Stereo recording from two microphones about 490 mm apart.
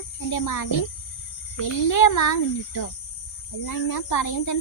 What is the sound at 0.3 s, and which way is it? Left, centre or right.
A woman's voice, left.